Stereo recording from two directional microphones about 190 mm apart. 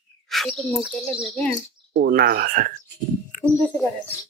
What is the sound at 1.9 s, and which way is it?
Speech, 55° right (ahead or behind).